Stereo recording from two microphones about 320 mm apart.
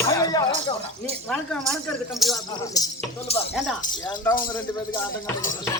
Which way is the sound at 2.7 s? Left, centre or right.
Centre.